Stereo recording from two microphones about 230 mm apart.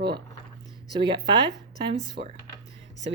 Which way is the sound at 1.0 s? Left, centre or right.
Centre.